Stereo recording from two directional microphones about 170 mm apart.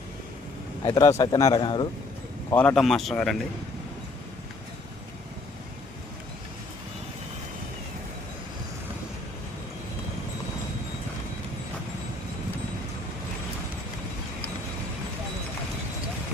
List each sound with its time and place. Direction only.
0.9 s speech: 20° left (ahead or behind)
2.5 s speech: 10° left (ahead or behind)